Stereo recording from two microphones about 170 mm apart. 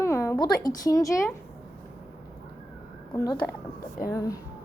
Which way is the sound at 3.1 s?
20° left (ahead or behind).